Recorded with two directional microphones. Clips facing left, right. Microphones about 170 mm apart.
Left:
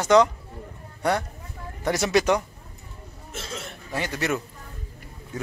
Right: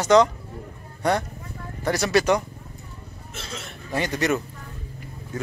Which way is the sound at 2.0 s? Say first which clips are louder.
Right 1 dB; 15° left (ahead or behind).